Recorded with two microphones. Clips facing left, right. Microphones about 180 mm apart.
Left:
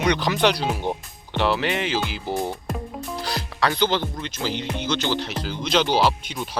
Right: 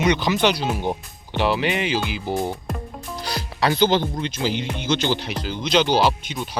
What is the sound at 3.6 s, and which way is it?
Speech, 15° right (ahead or behind).